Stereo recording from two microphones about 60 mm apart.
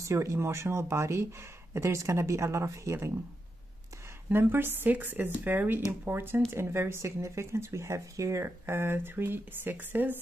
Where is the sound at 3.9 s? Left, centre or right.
Right.